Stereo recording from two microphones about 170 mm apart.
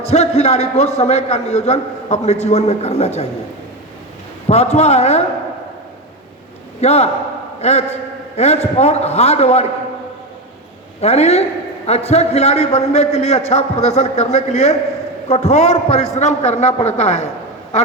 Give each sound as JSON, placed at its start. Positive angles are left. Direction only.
{"t": 0.1, "sound": "a man's voice", "side_deg": 40}
{"t": 4.4, "sound": "a man's voice", "side_deg": 40}
{"t": 6.8, "sound": "a man's voice", "side_deg": 40}
{"t": 11.0, "sound": "a man's voice", "side_deg": 40}